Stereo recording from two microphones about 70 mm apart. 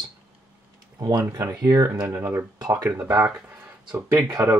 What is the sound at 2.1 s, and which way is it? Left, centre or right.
Speech, right.